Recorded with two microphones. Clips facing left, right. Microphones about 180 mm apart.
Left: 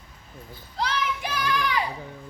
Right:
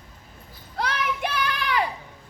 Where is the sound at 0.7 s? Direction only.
55° right (ahead or behind).